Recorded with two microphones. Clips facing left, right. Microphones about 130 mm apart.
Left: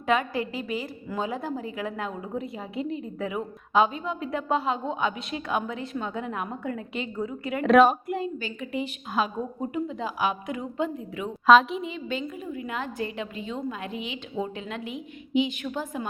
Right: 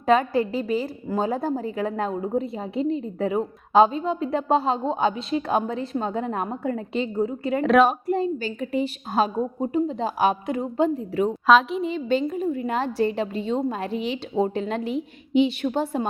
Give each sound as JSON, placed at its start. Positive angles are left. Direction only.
{"t": 0.0, "sound": "a woman's voice", "side_deg": -35}
{"t": 7.6, "sound": "a woman's voice", "side_deg": 0}
{"t": 8.0, "sound": "a woman's voice", "side_deg": -35}
{"t": 11.4, "sound": "a woman's voice", "side_deg": 0}
{"t": 11.9, "sound": "a woman's voice", "side_deg": -35}